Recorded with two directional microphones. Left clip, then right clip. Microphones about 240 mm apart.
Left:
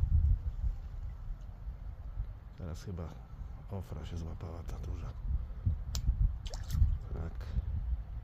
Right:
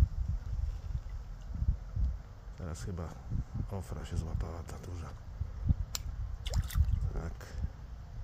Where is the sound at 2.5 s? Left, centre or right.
Centre.